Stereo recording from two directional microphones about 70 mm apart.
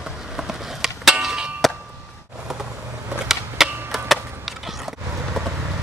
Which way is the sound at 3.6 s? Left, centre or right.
Centre.